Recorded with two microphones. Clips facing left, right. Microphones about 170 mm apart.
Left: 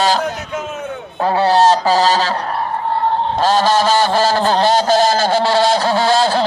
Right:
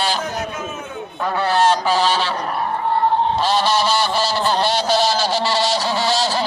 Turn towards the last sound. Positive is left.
turn(degrees=55)  # may be behind; listen again after turning